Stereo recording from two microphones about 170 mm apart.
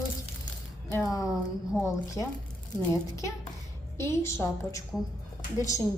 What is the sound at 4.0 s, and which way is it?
A woman's voice, 15° left (ahead or behind).